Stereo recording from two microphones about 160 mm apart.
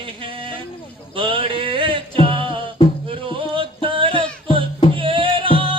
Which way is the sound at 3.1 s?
35° right (ahead or behind).